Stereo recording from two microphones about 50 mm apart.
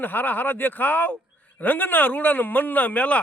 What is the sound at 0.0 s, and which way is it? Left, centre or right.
A man's voice, left.